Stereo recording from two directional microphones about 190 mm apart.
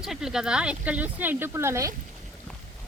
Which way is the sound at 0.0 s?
Centre (ahead or behind).